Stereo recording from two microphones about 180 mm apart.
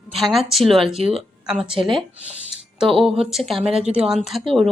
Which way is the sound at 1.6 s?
30° right (ahead or behind).